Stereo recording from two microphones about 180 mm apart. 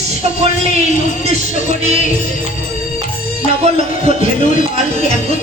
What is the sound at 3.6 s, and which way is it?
Music, 35° right (ahead or behind).